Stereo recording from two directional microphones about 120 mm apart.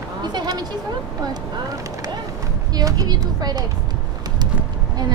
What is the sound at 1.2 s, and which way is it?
Speech, 30° right (ahead or behind).